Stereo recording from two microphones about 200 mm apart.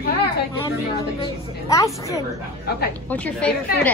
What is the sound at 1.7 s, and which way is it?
A woman's voice, 15° left (ahead or behind).